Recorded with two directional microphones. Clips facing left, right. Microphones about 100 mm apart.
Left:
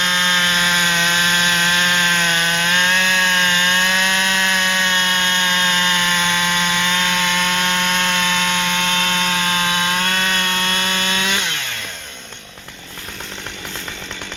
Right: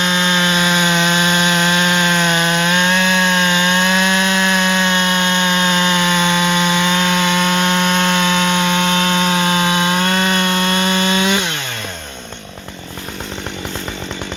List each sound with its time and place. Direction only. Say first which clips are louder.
0.0 s sawing: right 3 dB; 15° right (ahead or behind)